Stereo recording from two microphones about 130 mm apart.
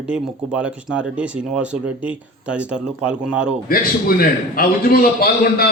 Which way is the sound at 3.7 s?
90° left.